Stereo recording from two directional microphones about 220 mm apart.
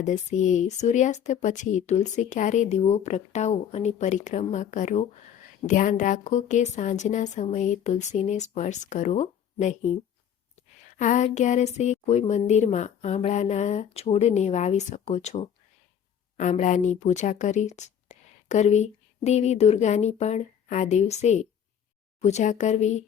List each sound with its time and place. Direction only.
0.0 s speech: 35° left (ahead or behind)